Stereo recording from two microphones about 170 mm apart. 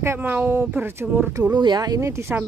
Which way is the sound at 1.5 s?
25° right (ahead or behind).